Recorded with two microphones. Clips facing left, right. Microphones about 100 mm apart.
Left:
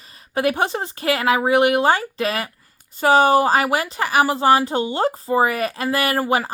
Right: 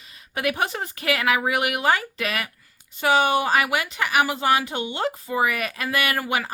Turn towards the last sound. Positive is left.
turn(degrees=35)  # may be behind; listen again after turning